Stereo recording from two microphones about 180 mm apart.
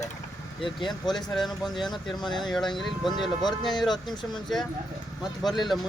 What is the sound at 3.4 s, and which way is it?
Speech, 25° left (ahead or behind).